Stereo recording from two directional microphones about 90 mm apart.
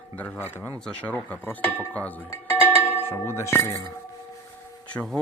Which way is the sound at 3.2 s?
30° left (ahead or behind).